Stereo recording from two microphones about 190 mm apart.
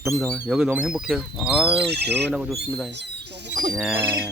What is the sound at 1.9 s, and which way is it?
Speech, 60° right (ahead or behind).